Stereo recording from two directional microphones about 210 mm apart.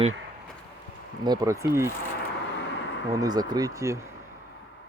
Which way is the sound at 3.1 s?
20° right (ahead or behind).